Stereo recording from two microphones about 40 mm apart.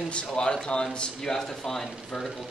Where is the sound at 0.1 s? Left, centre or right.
Left.